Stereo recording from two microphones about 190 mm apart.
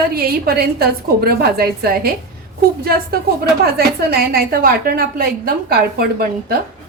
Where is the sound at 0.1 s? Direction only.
55° right (ahead or behind).